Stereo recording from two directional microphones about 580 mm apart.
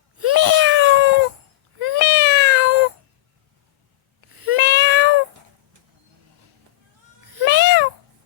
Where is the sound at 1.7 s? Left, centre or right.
Right.